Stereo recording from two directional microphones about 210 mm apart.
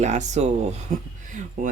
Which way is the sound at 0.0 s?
35° right (ahead or behind).